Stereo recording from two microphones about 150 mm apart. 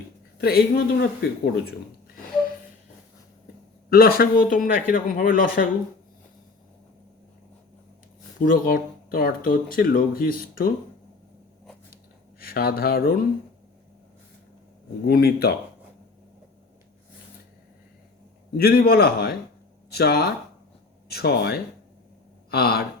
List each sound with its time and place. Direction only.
0.4 s speech: 90° left
3.8 s speech: 90° left; by 5.6 s 65° left (ahead or behind)
8.4 s speech: 70° left (ahead or behind)
12.4 s speech: 80° left
15.0 s speech: 90° left
18.5 s speech: 90° left